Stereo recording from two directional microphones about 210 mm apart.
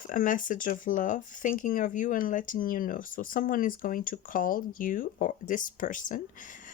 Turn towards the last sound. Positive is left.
turn(degrees=40)  # may be behind; listen again after turning